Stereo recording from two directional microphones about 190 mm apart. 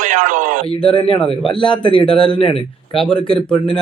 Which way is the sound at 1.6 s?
25° left (ahead or behind).